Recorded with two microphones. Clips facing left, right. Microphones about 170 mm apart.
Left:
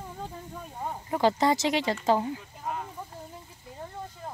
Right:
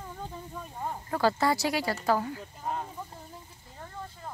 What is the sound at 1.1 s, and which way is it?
Speech, 20° left (ahead or behind).